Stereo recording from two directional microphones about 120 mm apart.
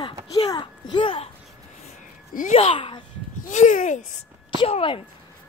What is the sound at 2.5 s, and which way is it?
Speech, 55° left (ahead or behind).